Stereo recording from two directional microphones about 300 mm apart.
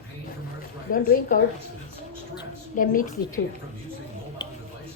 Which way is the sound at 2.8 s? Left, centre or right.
Left.